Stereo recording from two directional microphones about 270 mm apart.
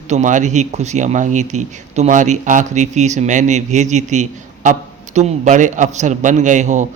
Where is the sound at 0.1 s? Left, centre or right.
Right.